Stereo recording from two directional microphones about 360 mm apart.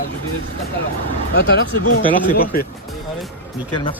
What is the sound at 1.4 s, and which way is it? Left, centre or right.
Speech, left.